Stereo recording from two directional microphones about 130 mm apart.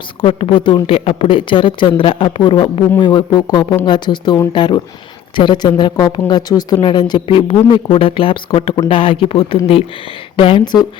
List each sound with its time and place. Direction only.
0.2 s speech: 45° left (ahead or behind)